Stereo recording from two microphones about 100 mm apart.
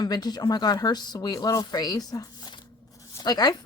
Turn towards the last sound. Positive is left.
turn(degrees=40)  # may be behind; listen again after turning